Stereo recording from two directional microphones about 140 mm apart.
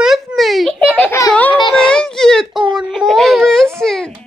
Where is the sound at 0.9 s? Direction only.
15° left (ahead or behind).